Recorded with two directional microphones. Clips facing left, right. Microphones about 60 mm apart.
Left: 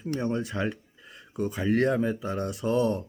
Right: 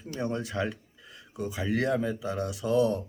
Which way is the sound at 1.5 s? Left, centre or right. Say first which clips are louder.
Left 3 dB; left.